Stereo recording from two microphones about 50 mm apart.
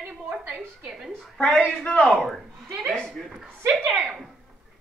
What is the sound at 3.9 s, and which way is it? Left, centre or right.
Speech, centre.